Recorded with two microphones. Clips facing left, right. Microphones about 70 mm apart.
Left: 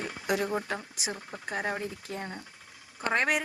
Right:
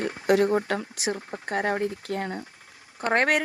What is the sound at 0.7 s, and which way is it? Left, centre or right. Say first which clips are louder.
A woman's voice: right 7 dB; right.